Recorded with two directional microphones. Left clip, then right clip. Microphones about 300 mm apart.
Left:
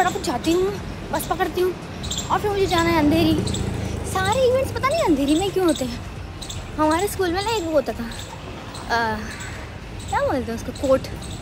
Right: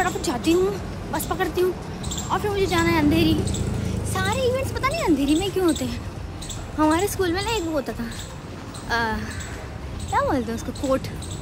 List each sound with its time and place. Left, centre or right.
0.0 s speech: centre